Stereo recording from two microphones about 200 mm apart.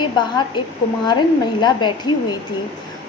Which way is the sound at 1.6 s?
20° left (ahead or behind).